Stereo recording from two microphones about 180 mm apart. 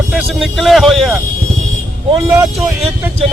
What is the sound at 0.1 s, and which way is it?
Speech, 5° right (ahead or behind).